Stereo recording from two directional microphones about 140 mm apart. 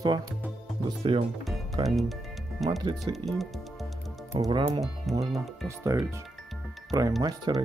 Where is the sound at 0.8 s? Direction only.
40° right (ahead or behind).